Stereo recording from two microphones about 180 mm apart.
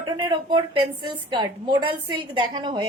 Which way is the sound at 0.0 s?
25° right (ahead or behind).